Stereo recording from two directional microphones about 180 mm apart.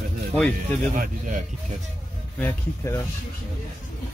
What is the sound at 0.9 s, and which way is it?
Speech, 45° right (ahead or behind).